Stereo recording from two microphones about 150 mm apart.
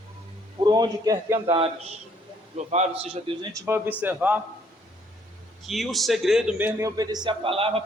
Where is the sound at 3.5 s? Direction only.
15° right (ahead or behind).